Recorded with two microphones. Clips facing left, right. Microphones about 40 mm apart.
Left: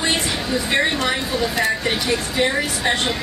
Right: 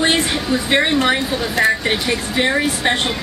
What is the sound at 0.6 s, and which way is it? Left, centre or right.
Speech, right.